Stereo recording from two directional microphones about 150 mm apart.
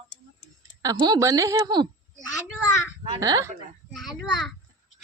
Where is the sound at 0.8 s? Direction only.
25° right (ahead or behind).